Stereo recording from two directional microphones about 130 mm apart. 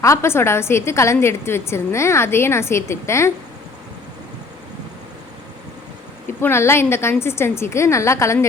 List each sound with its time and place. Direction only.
0.0 s a woman's voice: 20° left (ahead or behind)
6.4 s a woman's voice: 20° left (ahead or behind)